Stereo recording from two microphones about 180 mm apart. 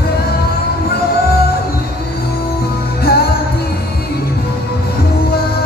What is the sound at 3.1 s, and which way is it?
Music, 55° left (ahead or behind).